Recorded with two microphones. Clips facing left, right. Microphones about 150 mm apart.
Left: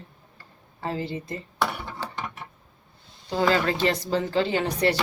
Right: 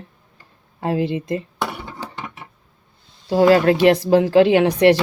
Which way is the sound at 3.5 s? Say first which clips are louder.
Right 10 dB; 65° right (ahead or behind).